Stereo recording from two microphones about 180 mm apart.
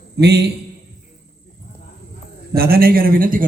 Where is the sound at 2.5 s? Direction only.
55° right (ahead or behind).